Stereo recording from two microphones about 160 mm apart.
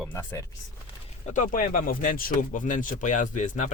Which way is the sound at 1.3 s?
55° left (ahead or behind).